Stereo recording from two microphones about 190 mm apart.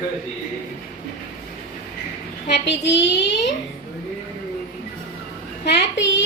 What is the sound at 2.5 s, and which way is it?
Speech, 70° left (ahead or behind).